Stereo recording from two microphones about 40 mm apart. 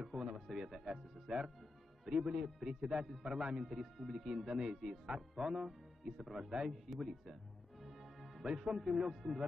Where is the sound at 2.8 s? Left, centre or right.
Right.